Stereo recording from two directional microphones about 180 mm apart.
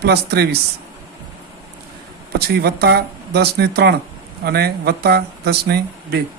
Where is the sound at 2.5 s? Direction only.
60° right (ahead or behind).